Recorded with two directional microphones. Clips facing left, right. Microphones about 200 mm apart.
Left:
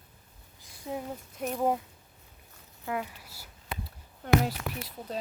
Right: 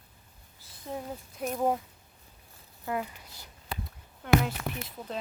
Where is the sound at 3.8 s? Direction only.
40° left (ahead or behind).